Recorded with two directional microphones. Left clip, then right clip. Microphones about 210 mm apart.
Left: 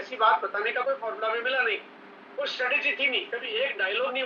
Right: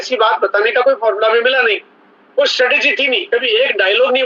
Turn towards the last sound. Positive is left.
turn(degrees=-55)  # may be behind; listen again after turning